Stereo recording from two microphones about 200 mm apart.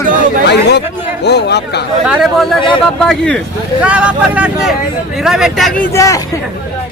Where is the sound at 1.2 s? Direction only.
55° left (ahead or behind).